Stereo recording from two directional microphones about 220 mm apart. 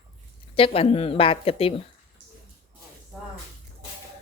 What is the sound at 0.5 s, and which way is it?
Speech, 25° left (ahead or behind).